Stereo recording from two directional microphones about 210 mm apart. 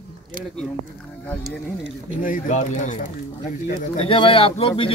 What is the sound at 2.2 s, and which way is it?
Speech, 40° left (ahead or behind).